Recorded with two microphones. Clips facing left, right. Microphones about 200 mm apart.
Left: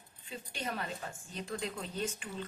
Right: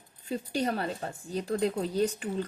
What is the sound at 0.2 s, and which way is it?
Speech, 40° right (ahead or behind).